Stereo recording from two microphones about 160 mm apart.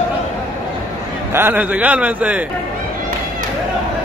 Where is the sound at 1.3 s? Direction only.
15° right (ahead or behind).